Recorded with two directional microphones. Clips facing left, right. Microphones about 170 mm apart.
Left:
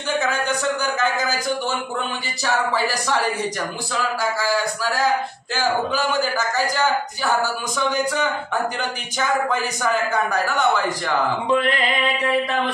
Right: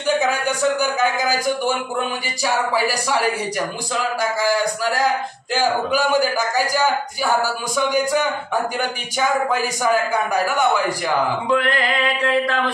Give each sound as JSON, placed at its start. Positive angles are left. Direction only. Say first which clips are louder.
{"t": 0.2, "sound": "a man's voice", "louder": "right 3 dB", "side_deg": -10}
{"t": 9.5, "sound": "a man's voice", "louder": "right 3 dB", "side_deg": -10}
{"t": 11.4, "sound": "a sound", "louder": "right 1 dB", "side_deg": 20}